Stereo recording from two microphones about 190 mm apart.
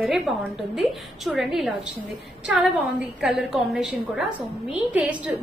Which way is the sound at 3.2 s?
Centre (ahead or behind).